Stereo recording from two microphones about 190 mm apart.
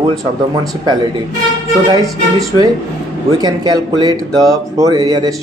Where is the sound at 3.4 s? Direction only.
20° right (ahead or behind).